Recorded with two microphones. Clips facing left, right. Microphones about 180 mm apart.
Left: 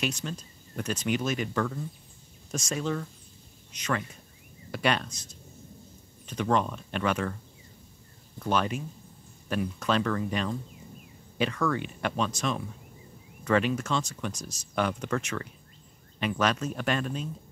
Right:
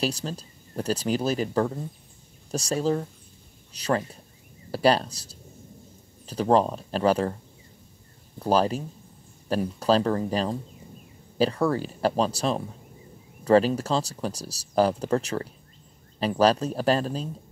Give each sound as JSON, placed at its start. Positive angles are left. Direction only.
{"t": 0.0, "sound": "speech", "side_deg": -35}
{"t": 8.4, "sound": "speech", "side_deg": -35}